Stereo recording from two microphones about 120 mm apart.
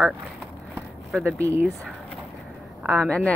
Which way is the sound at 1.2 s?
25° right (ahead or behind).